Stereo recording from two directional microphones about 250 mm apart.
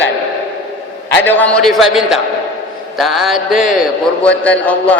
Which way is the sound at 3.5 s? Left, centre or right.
Left.